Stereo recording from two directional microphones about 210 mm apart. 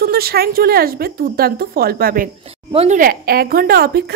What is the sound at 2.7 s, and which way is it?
A woman's voice, 30° right (ahead or behind).